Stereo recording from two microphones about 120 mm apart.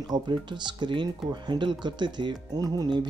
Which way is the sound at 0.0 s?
40° right (ahead or behind).